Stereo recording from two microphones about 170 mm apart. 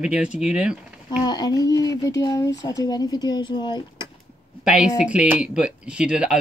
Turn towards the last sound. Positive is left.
turn(degrees=-5)  # may be behind; listen again after turning